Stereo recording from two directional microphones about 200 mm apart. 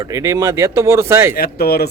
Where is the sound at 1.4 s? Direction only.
50° left (ahead or behind).